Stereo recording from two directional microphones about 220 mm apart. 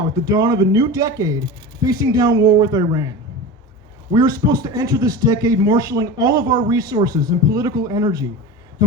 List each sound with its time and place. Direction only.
0.3 s a man's voice: 15° right (ahead or behind)
4.1 s a man's voice: 20° right (ahead or behind)